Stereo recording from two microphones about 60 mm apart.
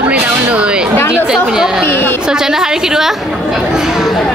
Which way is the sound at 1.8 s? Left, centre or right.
Left.